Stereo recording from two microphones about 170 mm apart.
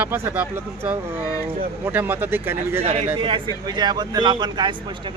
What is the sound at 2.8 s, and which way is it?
Speech, 35° right (ahead or behind).